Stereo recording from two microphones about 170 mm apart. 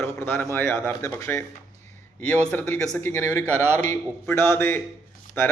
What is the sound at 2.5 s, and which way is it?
Speech, 10° left (ahead or behind).